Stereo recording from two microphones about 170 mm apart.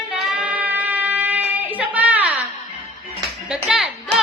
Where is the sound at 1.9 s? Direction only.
10° right (ahead or behind).